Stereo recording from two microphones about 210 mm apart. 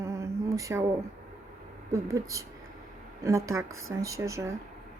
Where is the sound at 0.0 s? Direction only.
15° right (ahead or behind).